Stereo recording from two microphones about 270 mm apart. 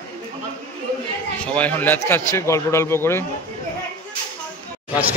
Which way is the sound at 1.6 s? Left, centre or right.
Centre.